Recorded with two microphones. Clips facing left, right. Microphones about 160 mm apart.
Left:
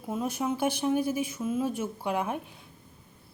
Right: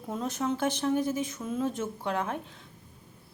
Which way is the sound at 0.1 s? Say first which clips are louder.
Left 1 dB; 10° left (ahead or behind).